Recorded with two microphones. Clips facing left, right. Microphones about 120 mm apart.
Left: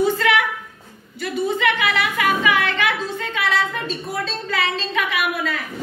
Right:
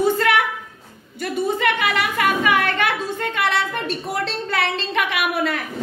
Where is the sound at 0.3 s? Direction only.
45° right (ahead or behind).